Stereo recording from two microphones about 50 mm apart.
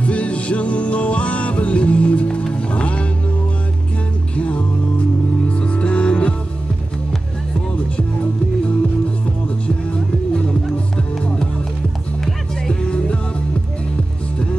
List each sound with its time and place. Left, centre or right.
0.0 s music: left
4.4 s music: left
12.6 s music: centre